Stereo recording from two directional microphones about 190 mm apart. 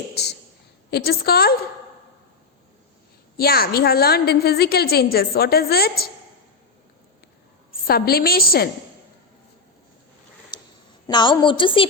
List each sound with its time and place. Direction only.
0.1 s a sound: 60° left (ahead or behind)
0.9 s a woman's voice: 55° left (ahead or behind)
3.3 s a woman's voice: 55° left (ahead or behind)
7.7 s a woman's voice: 50° left (ahead or behind)
11.0 s a woman's voice: 25° left (ahead or behind)